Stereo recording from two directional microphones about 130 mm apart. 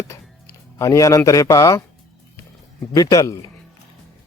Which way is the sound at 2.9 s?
25° left (ahead or behind).